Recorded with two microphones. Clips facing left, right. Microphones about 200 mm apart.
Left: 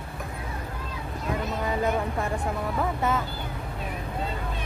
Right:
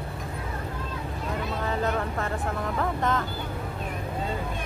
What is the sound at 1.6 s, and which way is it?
Speech, 10° left (ahead or behind).